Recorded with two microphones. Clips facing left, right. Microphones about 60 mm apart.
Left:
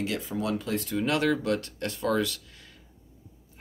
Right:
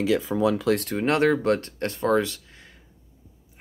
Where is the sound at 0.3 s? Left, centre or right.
Right.